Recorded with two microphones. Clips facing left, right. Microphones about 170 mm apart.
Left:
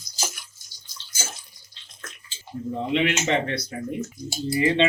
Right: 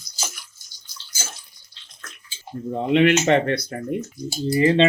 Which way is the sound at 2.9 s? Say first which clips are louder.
Right 7 dB; 55° right (ahead or behind).